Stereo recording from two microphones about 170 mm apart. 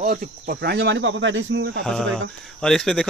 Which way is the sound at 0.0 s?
55° right (ahead or behind).